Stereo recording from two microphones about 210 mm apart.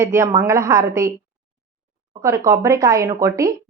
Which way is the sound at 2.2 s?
15° right (ahead or behind).